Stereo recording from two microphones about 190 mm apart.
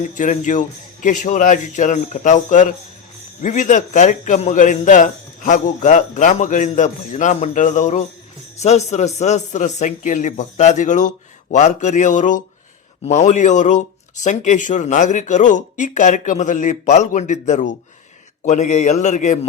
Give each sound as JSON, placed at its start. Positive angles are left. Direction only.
{"t": 0.0, "sound": "a man's voice", "side_deg": 40}